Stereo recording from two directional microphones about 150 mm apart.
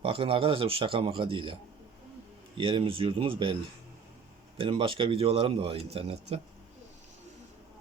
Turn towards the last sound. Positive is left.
turn(degrees=-45)  # may be behind; listen again after turning